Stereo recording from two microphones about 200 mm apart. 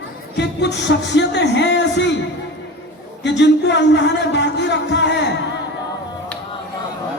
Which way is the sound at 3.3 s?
60° left (ahead or behind).